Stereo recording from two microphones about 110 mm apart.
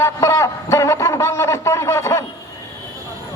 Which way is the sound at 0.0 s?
25° left (ahead or behind).